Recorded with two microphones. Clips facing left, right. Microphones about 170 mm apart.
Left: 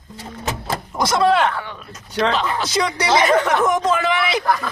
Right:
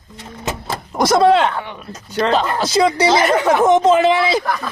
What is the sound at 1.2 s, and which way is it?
Speech, 25° right (ahead or behind).